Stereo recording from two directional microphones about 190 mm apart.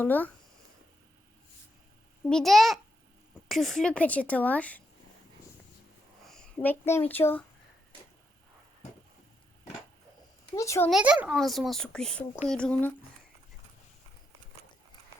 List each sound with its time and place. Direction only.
0.0 s speech: 10° left (ahead or behind)
2.3 s a child's voice: centre (ahead or behind)
6.2 s a child's voice: 5° left (ahead or behind)
10.5 s speech: 15° left (ahead or behind)
10.8 s a child's voice: 5° right (ahead or behind)